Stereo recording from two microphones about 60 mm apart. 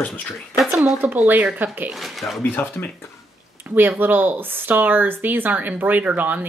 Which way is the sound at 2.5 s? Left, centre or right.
Left.